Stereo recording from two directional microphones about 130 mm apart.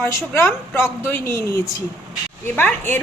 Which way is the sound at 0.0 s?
20° left (ahead or behind).